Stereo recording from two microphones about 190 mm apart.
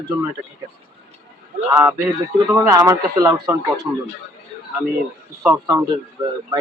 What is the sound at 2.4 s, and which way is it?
A man's voice, 15° right (ahead or behind).